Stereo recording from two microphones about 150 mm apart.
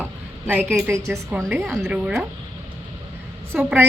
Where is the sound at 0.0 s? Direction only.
10° right (ahead or behind).